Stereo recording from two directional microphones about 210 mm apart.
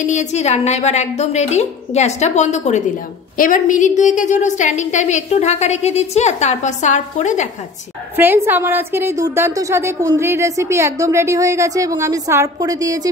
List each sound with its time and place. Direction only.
0.0 s a woman's voice: 35° left (ahead or behind)
8.2 s a woman's voice: 10° right (ahead or behind)